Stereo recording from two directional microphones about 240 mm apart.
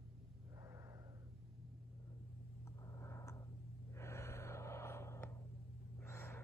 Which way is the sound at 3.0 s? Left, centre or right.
Centre.